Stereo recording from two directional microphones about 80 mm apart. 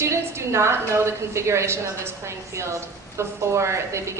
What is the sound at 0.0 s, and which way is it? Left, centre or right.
A woman's voice, right.